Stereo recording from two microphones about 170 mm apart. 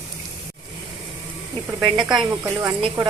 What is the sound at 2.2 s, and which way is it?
Speech, 25° right (ahead or behind).